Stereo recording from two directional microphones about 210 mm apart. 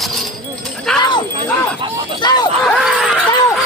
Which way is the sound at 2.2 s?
20° left (ahead or behind).